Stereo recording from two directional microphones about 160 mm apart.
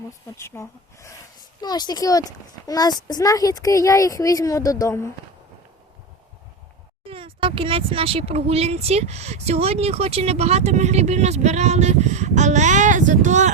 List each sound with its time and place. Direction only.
0.3 s speech: 15° left (ahead or behind)
7.1 s speech: 35° right (ahead or behind); by 13.5 s 50° right (ahead or behind)